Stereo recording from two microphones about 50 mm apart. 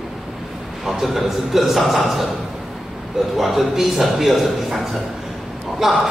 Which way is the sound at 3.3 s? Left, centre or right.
Centre.